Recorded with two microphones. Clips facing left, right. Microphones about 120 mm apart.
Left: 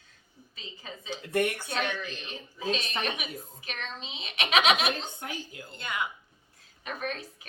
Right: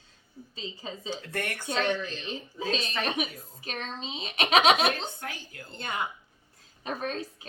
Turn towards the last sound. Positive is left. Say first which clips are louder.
# right 2 dB
turn(degrees=-30)  # may be behind; listen again after turning